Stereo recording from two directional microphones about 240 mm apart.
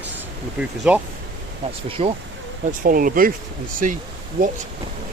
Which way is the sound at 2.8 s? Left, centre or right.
Right.